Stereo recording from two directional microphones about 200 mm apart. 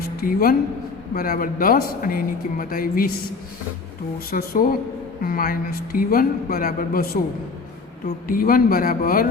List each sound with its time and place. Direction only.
0.2 s speech: 45° left (ahead or behind)
4.3 s speech: 45° left (ahead or behind)
8.3 s speech: 45° left (ahead or behind)